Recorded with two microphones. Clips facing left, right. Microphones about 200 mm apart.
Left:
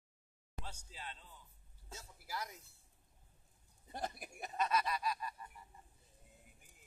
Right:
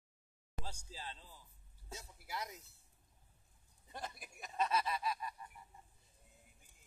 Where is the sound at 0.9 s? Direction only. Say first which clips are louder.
Right 1 dB; 30° right (ahead or behind).